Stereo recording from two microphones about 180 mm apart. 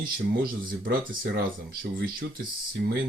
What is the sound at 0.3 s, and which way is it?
Speech, 55° right (ahead or behind).